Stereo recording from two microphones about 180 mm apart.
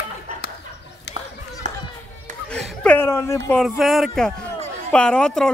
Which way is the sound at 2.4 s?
5° left (ahead or behind).